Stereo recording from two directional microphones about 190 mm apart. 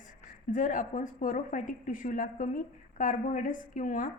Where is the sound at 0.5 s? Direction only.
40° left (ahead or behind).